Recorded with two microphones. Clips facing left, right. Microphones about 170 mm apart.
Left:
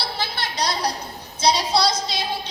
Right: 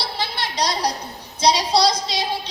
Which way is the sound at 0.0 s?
30° right (ahead or behind).